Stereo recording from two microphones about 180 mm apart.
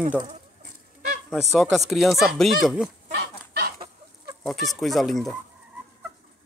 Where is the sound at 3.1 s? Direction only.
60° right (ahead or behind).